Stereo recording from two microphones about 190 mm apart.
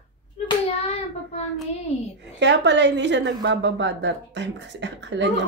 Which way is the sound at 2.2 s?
65° right (ahead or behind).